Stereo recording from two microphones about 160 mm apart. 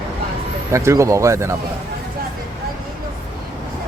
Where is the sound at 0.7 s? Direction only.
20° right (ahead or behind).